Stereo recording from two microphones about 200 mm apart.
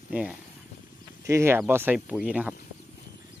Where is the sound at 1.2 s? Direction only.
15° right (ahead or behind).